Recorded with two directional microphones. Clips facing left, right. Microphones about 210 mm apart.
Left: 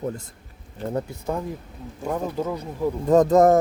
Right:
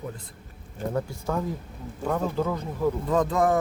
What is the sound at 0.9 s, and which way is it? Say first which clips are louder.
Speech: left 1 dB; 25° left (ahead or behind).